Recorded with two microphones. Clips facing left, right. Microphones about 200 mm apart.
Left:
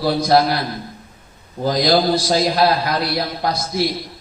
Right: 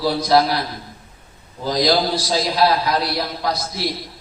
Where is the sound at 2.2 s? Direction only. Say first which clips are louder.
Left 2 dB; 55° left (ahead or behind).